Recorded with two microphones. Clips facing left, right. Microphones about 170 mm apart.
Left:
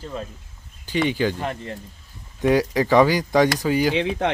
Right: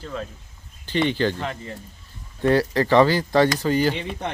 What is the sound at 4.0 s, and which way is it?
Speech, 90° left.